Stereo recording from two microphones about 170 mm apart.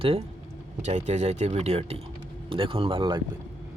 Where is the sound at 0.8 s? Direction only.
45° right (ahead or behind).